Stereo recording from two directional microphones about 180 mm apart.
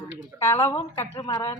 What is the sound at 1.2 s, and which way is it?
Speech, 30° left (ahead or behind).